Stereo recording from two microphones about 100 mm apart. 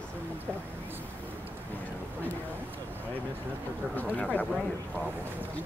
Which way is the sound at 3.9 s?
15° left (ahead or behind).